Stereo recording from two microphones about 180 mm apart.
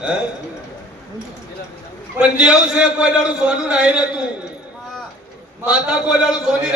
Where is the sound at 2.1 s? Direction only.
5° right (ahead or behind).